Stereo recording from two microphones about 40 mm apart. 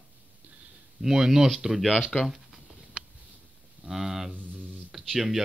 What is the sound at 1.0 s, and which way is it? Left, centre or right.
Speech, centre.